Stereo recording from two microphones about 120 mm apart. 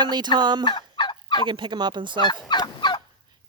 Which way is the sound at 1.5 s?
40° right (ahead or behind).